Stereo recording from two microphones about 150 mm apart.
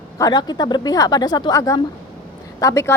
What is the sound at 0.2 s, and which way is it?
A woman's voice, 30° left (ahead or behind).